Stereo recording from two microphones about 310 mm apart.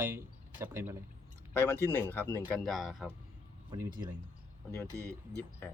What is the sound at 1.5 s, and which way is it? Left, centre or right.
Speech, centre.